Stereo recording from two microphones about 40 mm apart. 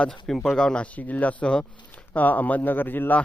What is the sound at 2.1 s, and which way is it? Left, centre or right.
Speech, left.